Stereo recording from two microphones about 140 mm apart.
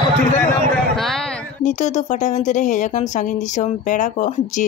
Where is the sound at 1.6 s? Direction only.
55° left (ahead or behind).